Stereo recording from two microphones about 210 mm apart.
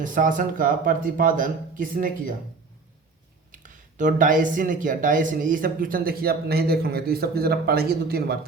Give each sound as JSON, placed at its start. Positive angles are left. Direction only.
{"t": 0.0, "sound": "speech", "side_deg": -40}
{"t": 3.5, "sound": "speech", "side_deg": -40}